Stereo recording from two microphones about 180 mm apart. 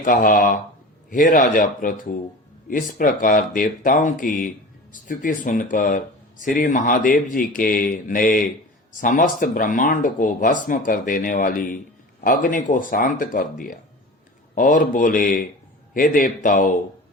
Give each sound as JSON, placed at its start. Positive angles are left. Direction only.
{"t": 0.0, "sound": "speech", "side_deg": 50}